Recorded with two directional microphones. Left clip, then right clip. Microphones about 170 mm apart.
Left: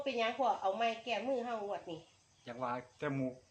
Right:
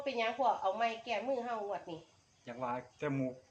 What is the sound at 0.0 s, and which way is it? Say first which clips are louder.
A woman's voice: right 1 dB; 55° left (ahead or behind).